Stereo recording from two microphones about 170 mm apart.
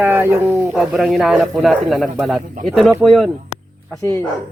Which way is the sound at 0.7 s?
Centre (ahead or behind).